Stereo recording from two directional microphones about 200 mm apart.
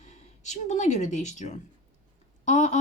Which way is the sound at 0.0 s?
35° left (ahead or behind).